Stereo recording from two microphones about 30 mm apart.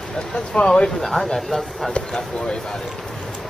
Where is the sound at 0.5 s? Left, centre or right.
Left.